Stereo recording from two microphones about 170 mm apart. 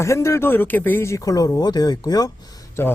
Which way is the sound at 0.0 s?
15° left (ahead or behind).